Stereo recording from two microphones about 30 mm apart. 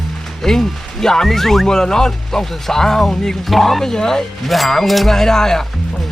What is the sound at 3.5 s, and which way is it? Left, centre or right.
Speech, centre.